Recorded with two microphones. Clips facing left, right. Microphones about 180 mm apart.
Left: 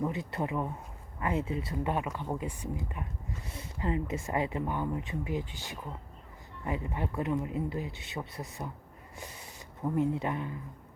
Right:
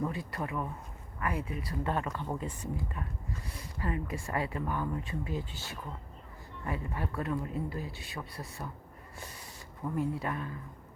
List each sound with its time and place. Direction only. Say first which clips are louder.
0.0 s speech: left 2 dB; 20° left (ahead or behind)
9.8 s speech: left 4 dB; 20° left (ahead or behind)